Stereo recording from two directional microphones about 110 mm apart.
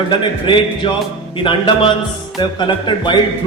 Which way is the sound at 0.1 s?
50° left (ahead or behind).